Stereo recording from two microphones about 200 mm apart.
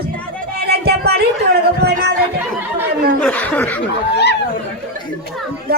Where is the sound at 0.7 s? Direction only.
50° right (ahead or behind).